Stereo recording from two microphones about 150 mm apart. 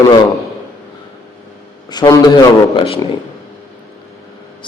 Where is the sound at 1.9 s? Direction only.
30° left (ahead or behind).